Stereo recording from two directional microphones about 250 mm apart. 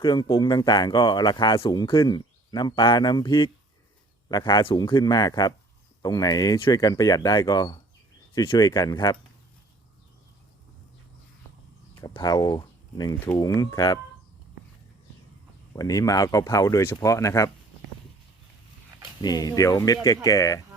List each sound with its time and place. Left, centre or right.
0.0 s speech: centre
11.9 s speech: centre
15.7 s speech: centre
19.2 s speech: centre